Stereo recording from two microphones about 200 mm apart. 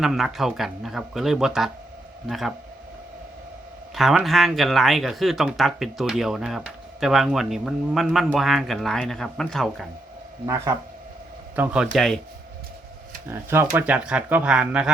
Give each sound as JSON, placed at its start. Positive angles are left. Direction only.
{"t": 0.0, "sound": "speech", "side_deg": 0}
{"t": 3.9, "sound": "speech", "side_deg": 0}
{"t": 10.4, "sound": "speech", "side_deg": -15}
{"t": 13.3, "sound": "speech", "side_deg": -10}